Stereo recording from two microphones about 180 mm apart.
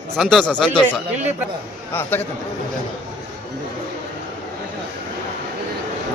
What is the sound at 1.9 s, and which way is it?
Speech, 10° left (ahead or behind).